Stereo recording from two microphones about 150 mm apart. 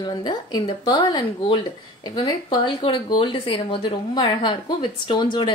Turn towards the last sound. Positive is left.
turn(degrees=30)  # may be behind; listen again after turning